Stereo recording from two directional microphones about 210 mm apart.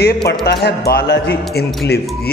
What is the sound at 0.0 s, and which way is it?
A man's voice, 50° left (ahead or behind).